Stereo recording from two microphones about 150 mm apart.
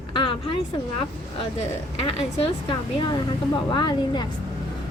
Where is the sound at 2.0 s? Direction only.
35° left (ahead or behind).